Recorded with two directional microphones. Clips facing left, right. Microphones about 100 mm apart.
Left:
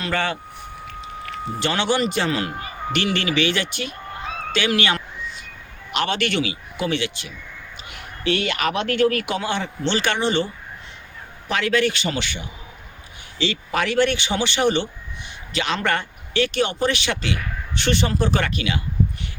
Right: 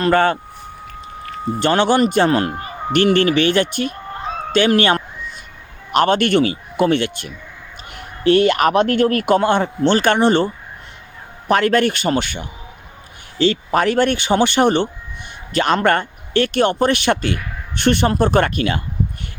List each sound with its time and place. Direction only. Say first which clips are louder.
0.0 s a man's voice: right 9 dB; 45° right (ahead or behind)
1.5 s a man's voice: right 7 dB; 50° right (ahead or behind)